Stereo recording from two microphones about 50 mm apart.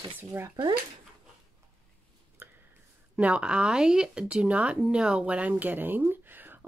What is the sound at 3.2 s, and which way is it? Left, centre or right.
Speech, right.